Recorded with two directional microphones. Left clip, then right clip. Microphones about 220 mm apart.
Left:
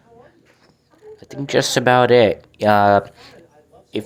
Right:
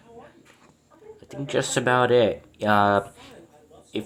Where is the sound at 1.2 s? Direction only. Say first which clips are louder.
Left 7 dB; 15° left (ahead or behind).